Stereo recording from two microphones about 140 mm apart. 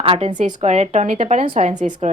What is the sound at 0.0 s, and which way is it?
Speech, 40° right (ahead or behind).